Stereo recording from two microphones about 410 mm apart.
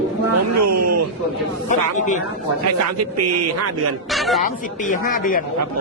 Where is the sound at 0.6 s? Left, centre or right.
Right.